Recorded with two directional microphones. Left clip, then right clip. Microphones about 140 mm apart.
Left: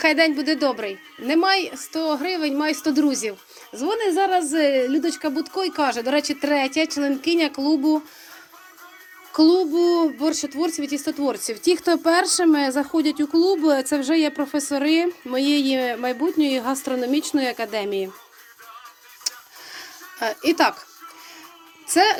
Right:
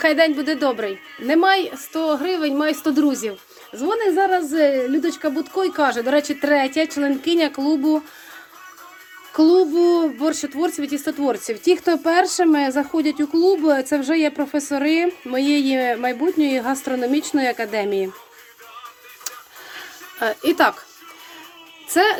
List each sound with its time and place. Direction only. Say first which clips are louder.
0.0 s a child's voice: right 2 dB; 10° right (ahead or behind)
3.8 s a child's voice: right 2 dB; centre (ahead or behind); by 8.0 s 20° right (ahead or behind)
9.3 s a child's voice: right 2 dB; 30° right (ahead or behind)
19.3 s a sound: left 3 dB; 25° right (ahead or behind)
21.8 s speech: right 1 dB; 20° right (ahead or behind)